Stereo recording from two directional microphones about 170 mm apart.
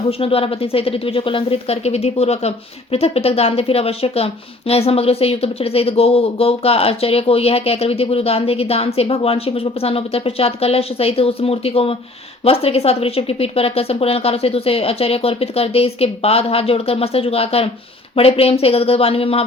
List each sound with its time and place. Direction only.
0.2 s a woman's voice: 35° left (ahead or behind)